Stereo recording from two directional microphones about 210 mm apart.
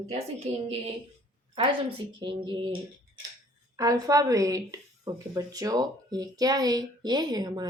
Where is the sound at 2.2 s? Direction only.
20° right (ahead or behind).